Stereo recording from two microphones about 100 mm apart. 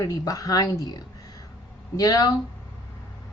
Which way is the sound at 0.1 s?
35° left (ahead or behind).